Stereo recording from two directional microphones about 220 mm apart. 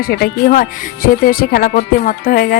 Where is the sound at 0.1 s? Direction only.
45° left (ahead or behind).